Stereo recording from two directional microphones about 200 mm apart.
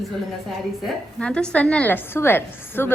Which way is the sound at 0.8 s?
5° left (ahead or behind).